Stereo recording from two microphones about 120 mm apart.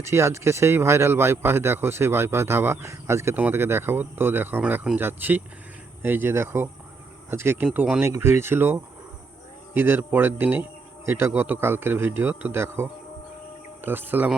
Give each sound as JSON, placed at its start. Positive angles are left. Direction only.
{"t": 0.0, "sound": "a man's voice", "side_deg": -25}